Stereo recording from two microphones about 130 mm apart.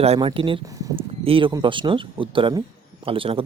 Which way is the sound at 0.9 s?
45° right (ahead or behind).